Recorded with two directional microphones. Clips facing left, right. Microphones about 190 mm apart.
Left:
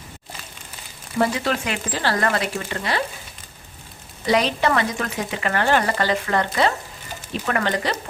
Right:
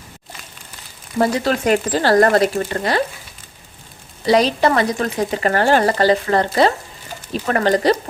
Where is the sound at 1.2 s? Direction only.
40° right (ahead or behind).